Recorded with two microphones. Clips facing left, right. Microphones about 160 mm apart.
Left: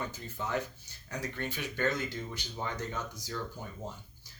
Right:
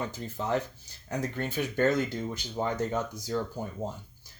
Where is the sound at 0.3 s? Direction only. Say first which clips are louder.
Right 5 dB; 30° right (ahead or behind).